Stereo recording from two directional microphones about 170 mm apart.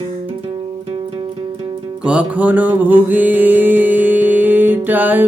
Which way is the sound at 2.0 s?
5° right (ahead or behind).